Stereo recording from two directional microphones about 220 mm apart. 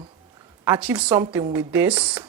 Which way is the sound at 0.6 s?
10° right (ahead or behind).